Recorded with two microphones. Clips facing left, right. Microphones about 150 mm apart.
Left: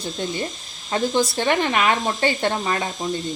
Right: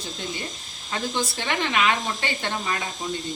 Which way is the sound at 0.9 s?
40° left (ahead or behind).